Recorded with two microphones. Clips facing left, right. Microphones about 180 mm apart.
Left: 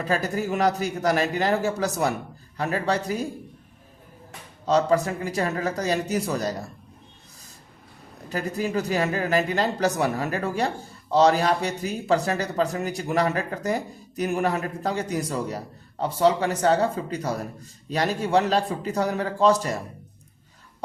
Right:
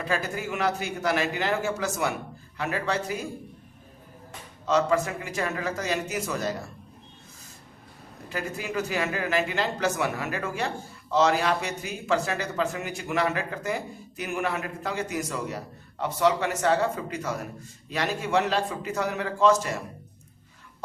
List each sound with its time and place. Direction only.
0.0 s speech: 40° left (ahead or behind)
4.6 s speech: 35° left (ahead or behind)
8.3 s speech: 40° left (ahead or behind)